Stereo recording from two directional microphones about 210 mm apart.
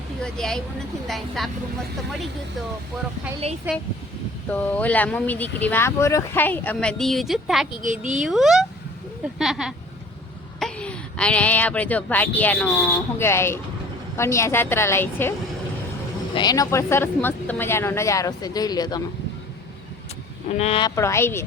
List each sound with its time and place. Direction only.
0.2 s speech: 5° left (ahead or behind)
3.7 s speech: 5° right (ahead or behind)
4.4 s speech: 10° left (ahead or behind)
7.8 s a woman's voice: 35° right (ahead or behind)
8.2 s speech: centre (ahead or behind)
16.3 s speech: 20° left (ahead or behind)
20.6 s a woman's voice: 25° left (ahead or behind)
20.9 s speech: 15° left (ahead or behind)